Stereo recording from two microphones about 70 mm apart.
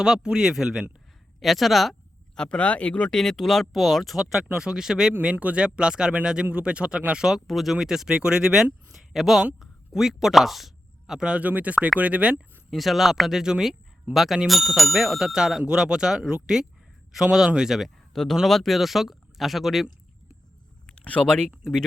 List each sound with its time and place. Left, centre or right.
0.0 s speech: centre
2.3 s speech: centre
5.2 s speech: centre
12.7 s speech: centre
20.8 s speech: centre